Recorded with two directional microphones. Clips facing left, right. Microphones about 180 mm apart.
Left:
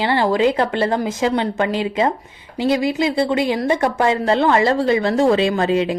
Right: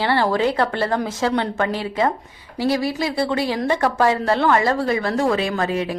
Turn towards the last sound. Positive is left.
turn(degrees=25)  # may be behind; listen again after turning